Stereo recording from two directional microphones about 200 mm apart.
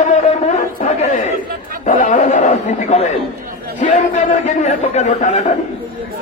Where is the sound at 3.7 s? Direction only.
35° left (ahead or behind).